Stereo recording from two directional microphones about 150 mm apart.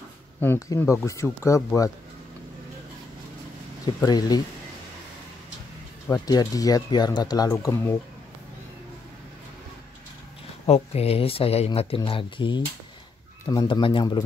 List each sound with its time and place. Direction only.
0.4 s speech: 15° left (ahead or behind)
3.8 s speech: 25° left (ahead or behind)
6.0 s speech: 15° left (ahead or behind)
7.5 s speech: 15° left (ahead or behind)
10.7 s speech: 45° left (ahead or behind)